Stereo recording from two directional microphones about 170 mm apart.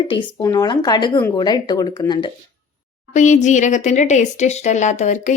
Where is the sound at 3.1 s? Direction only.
45° left (ahead or behind).